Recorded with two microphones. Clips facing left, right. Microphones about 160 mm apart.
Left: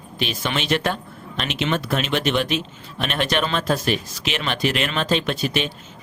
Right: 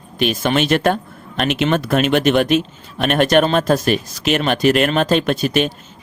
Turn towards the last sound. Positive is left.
turn(degrees=-45)  # may be behind; listen again after turning